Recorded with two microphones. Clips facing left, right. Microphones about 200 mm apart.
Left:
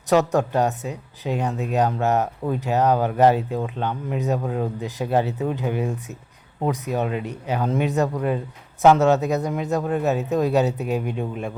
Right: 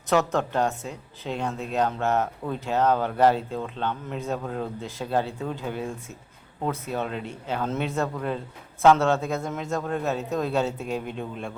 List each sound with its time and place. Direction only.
0.1 s speech: 15° left (ahead or behind)